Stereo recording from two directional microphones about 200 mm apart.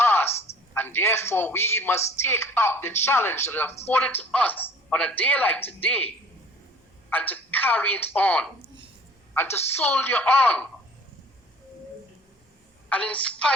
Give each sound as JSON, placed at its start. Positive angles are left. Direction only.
{"t": 0.0, "sound": "a sound", "side_deg": 10}
{"t": 0.7, "sound": "a woman's voice", "side_deg": 10}
{"t": 7.1, "sound": "a woman's voice", "side_deg": 10}
{"t": 12.9, "sound": "a woman's voice", "side_deg": 5}